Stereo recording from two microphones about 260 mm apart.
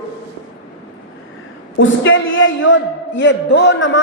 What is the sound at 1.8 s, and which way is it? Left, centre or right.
A man's voice, left.